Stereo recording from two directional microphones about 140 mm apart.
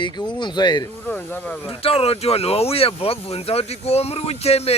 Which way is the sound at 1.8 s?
45° left (ahead or behind).